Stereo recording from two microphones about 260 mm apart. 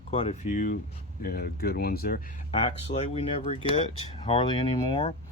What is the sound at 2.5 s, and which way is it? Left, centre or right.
Speech, left.